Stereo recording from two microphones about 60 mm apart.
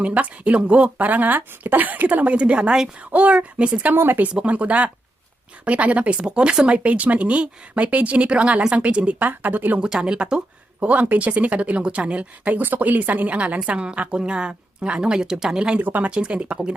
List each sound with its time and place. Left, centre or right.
0.0 s speech: right
3.9 s speech: right
4.4 s speech: right
9.8 s a woman's voice: centre
15.8 s speech: right
16.1 s a woman's voice: centre